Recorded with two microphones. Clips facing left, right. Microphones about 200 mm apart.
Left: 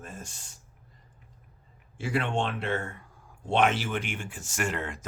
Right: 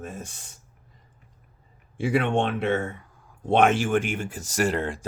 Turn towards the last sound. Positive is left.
turn(degrees=-35)  # may be behind; listen again after turning